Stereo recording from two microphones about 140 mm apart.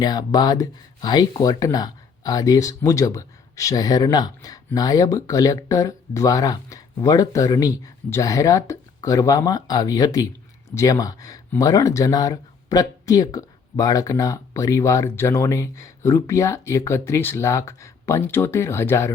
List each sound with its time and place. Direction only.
0.0 s speech: 30° left (ahead or behind)